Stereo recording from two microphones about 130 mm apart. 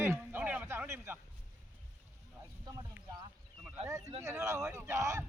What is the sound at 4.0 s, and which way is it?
Speech, 60° right (ahead or behind).